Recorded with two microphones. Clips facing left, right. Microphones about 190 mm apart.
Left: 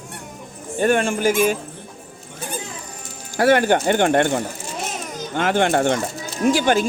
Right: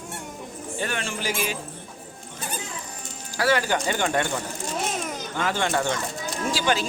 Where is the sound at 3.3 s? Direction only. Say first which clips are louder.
Left 7 dB; 55° left (ahead or behind).